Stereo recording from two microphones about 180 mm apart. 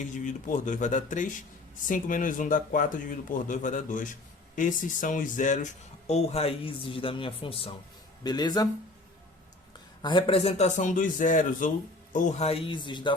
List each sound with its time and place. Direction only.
0.3 s a man's voice: 45° left (ahead or behind); by 8.7 s 20° left (ahead or behind)
10.0 s a man's voice: 25° left (ahead or behind)